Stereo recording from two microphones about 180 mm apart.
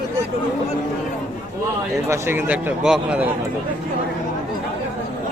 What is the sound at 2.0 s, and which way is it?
Speech, 15° right (ahead or behind).